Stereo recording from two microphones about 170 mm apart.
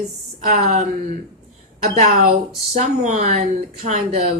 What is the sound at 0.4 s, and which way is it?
A woman's voice, 45° right (ahead or behind).